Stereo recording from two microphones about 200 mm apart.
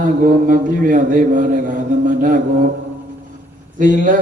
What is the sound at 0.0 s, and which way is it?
Mantra, 40° right (ahead or behind).